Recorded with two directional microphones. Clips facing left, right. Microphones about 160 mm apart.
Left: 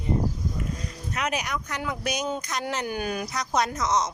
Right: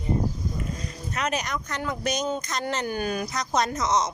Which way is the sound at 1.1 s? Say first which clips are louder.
Right 1 dB; 10° left (ahead or behind).